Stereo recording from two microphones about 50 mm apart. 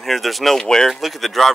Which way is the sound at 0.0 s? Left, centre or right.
Centre.